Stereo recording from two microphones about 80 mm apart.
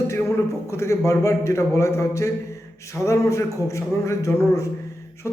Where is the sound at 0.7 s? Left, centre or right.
Left.